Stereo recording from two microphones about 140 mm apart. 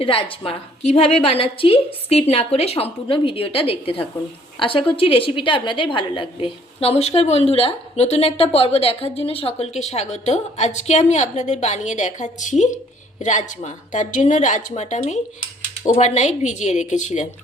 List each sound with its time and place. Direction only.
0.0 s a woman's voice: 40° left (ahead or behind); by 17.2 s 60° left (ahead or behind)